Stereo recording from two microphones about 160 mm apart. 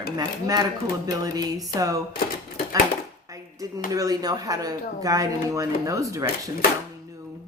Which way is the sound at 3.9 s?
25° right (ahead or behind).